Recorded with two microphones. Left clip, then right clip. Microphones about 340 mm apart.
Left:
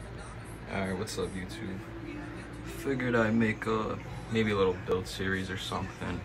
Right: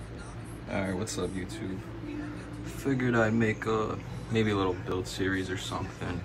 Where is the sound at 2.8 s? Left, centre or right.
Centre.